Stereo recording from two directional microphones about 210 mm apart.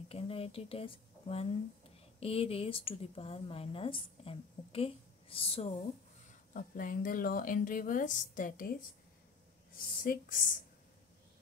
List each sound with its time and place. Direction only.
0.1 s a woman's voice: 25° left (ahead or behind)
6.5 s speech: 40° left (ahead or behind)
10.0 s speech: 40° left (ahead or behind)